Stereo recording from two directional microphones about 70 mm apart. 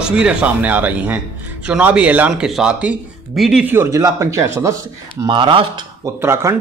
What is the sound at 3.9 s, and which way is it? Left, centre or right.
Speech, right.